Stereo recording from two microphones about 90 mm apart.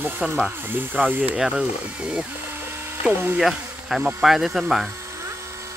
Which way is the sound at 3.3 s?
5° right (ahead or behind).